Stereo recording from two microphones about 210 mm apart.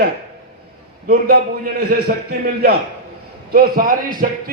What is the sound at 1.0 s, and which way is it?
A man's voice, 45° right (ahead or behind).